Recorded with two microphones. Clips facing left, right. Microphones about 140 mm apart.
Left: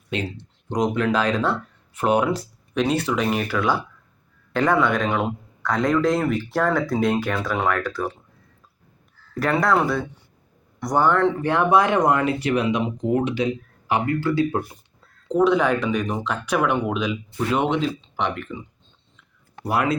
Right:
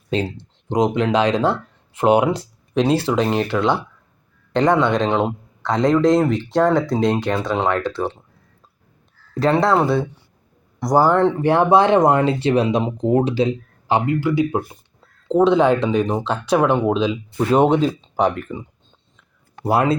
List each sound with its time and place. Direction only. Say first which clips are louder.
0.1 s speech: right 6 dB; 30° right (ahead or behind)
9.4 s speech: right 4 dB; 25° right (ahead or behind)
14.2 s speech: right 2 dB; 15° right (ahead or behind); by 18.6 s 40° right (ahead or behind)
19.6 s speech: right 5 dB; 30° right (ahead or behind)